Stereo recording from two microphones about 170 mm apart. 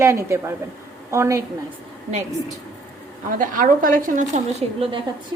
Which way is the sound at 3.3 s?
50° right (ahead or behind).